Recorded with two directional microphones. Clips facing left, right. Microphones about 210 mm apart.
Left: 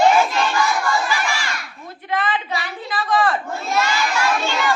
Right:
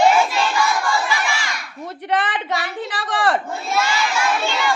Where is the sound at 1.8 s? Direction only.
75° right (ahead or behind).